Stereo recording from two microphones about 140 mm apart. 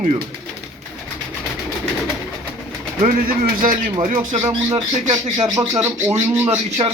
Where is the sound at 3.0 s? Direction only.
75° right (ahead or behind).